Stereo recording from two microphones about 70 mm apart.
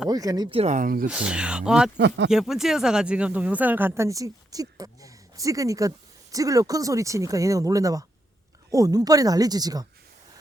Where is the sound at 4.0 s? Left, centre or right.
Right.